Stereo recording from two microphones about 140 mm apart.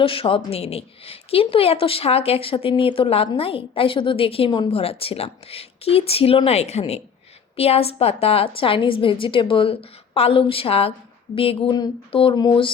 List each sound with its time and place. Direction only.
0.0 s a woman's voice: 40° left (ahead or behind)